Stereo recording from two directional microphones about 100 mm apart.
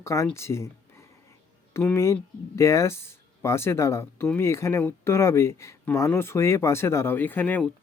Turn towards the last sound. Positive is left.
turn(degrees=15)  # may be behind; listen again after turning